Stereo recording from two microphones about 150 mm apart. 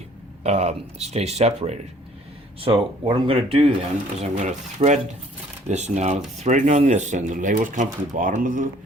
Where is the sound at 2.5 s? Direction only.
35° right (ahead or behind).